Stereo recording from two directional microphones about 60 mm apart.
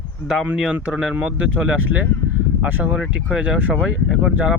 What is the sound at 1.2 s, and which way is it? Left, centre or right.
Speech, centre.